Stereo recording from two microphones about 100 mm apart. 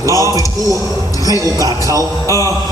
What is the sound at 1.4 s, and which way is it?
Speech, 35° right (ahead or behind).